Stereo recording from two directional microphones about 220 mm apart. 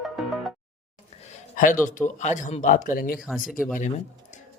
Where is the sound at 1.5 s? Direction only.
35° left (ahead or behind).